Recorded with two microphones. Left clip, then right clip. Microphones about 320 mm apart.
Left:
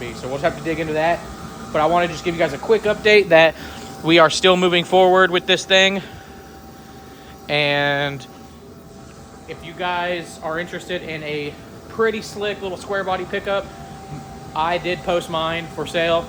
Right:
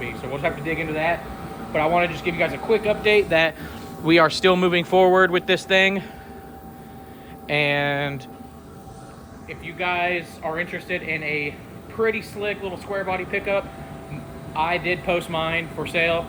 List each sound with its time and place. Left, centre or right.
0.0 s speech: centre
3.6 s a man's voice: centre
7.4 s a man's voice: centre
9.5 s speech: centre